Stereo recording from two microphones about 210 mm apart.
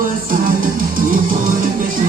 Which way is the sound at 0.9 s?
40° right (ahead or behind).